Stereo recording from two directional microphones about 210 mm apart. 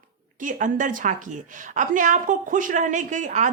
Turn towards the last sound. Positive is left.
turn(degrees=-35)  # may be behind; listen again after turning